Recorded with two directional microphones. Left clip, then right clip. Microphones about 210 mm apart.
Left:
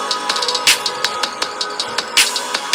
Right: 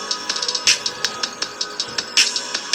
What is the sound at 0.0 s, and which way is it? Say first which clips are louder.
Music: left 5 dB; 35° left (ahead or behind).